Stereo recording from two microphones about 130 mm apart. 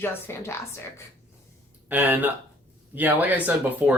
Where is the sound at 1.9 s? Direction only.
15° right (ahead or behind).